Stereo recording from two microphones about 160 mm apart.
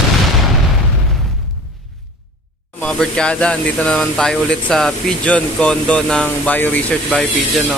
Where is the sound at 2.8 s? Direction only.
5° left (ahead or behind).